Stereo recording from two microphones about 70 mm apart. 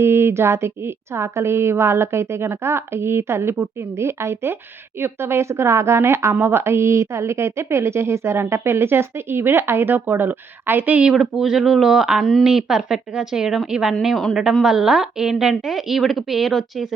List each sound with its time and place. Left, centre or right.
0.0 s a woman's voice: right
11.1 s a woman's voice: centre